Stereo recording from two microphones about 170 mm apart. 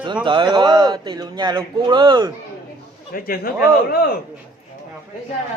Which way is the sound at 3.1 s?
60° left (ahead or behind).